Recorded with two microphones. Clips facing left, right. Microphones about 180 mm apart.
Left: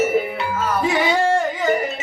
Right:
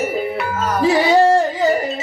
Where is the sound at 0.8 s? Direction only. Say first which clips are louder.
Right 7 dB; 35° right (ahead or behind).